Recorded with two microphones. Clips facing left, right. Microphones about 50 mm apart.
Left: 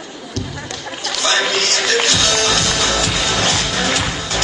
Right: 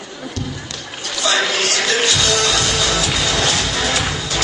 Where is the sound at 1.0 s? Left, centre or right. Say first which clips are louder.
Left 1 dB; left.